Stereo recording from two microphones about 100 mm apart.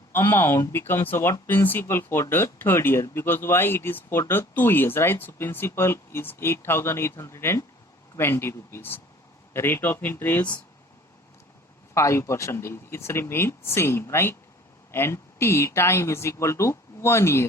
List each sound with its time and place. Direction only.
0.1 s speech: 20° left (ahead or behind)
11.9 s speech: 30° left (ahead or behind)